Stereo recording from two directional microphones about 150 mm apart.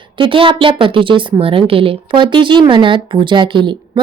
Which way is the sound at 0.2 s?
35° right (ahead or behind).